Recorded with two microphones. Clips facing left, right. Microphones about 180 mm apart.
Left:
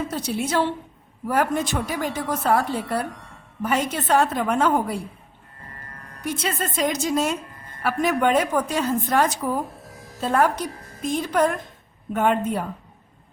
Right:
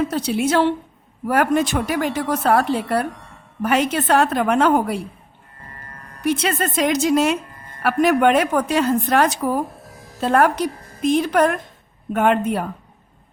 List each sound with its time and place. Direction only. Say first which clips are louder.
0.1 s a woman's voice: right 5 dB; 80° right
6.2 s a woman's voice: right 6 dB; 75° right (ahead or behind)